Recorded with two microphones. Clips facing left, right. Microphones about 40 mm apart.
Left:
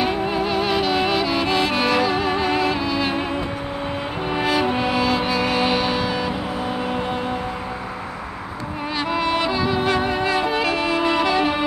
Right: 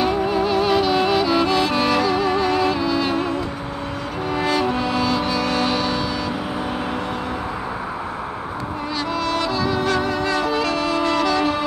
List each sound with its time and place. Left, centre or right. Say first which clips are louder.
0.0 s music: right 2 dB; centre
9.1 s music: left 2 dB; left